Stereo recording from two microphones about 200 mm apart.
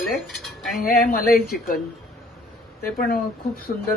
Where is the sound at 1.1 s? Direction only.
50° left (ahead or behind).